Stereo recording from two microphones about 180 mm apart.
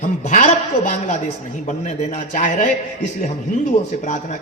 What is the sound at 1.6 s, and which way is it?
A man's voice, 45° left (ahead or behind).